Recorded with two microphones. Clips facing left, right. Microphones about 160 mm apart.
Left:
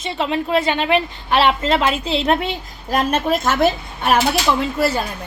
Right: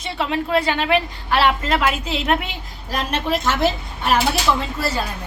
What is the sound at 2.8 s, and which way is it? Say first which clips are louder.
A woman's voice: left 5 dB; 50° left (ahead or behind).